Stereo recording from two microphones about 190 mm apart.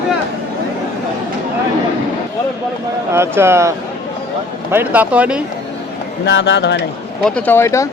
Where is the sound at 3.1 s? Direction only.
15° right (ahead or behind).